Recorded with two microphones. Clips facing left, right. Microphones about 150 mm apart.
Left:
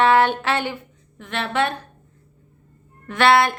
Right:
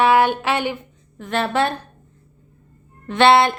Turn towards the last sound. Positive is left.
turn(degrees=-25)  # may be behind; listen again after turning